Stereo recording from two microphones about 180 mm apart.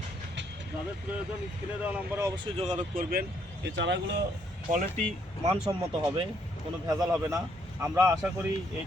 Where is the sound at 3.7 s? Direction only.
80° right.